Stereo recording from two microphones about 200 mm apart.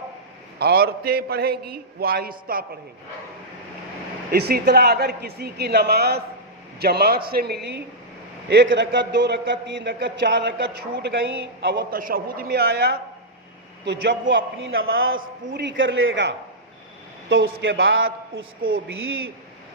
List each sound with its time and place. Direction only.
0.6 s a man's voice: 50° right (ahead or behind)
4.3 s a man's voice: 50° right (ahead or behind); by 18.4 s 75° right (ahead or behind)